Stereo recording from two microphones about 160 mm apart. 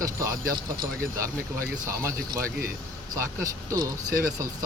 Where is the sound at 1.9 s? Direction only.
15° right (ahead or behind).